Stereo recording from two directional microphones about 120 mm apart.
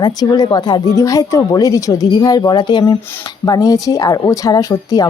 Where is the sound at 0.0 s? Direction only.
35° left (ahead or behind).